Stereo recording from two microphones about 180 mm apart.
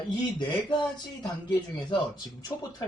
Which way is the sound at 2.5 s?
20° left (ahead or behind).